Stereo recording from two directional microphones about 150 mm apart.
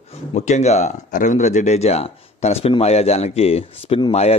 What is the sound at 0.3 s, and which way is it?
Speech, 50° left (ahead or behind).